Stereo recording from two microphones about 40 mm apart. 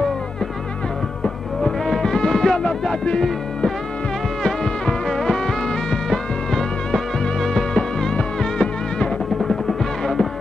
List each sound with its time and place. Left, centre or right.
1.2 s music: centre
4.4 s music: centre
7.7 s music: centre